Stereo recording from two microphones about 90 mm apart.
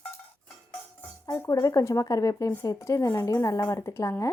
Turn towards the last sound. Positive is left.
turn(degrees=30)  # may be behind; listen again after turning